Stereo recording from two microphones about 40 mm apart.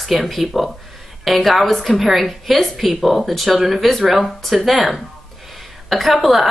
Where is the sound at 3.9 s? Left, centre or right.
Centre.